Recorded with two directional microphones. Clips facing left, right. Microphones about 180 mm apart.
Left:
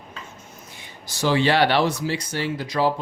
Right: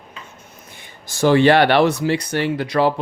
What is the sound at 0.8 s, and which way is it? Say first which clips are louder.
Speech: right 7 dB; 50° right (ahead or behind).